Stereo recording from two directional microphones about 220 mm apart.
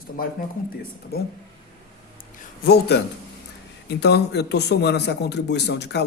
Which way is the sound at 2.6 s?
45° left (ahead or behind).